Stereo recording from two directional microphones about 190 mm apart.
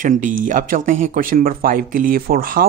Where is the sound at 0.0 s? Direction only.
45° right (ahead or behind).